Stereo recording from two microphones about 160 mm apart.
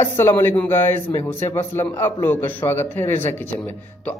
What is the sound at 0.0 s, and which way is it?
Speech, 15° left (ahead or behind).